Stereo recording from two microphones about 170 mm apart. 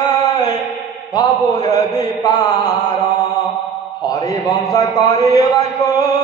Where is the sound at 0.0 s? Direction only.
25° left (ahead or behind).